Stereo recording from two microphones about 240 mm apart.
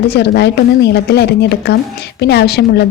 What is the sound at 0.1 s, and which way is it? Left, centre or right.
A woman's voice, left.